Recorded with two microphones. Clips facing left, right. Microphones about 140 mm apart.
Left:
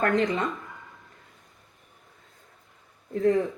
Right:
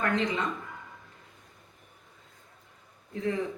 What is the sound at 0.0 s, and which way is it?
Speech, 45° left (ahead or behind).